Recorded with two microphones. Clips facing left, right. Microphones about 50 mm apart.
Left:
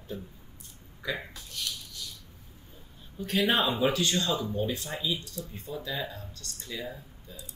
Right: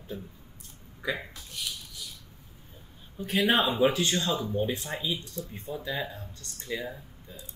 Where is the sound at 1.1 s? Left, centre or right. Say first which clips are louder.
Even; centre.